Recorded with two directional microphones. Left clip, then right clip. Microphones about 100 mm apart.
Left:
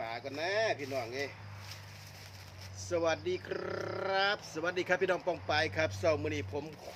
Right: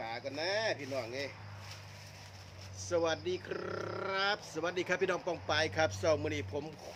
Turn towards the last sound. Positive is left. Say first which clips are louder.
# even
turn(degrees=-30)  # may be behind; listen again after turning